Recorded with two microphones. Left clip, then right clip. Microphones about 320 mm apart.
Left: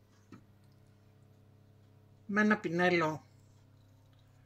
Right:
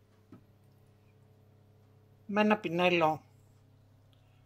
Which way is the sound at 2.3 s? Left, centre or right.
Centre.